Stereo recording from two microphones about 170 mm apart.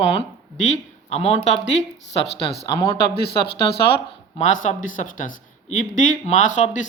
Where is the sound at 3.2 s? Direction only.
70° left (ahead or behind).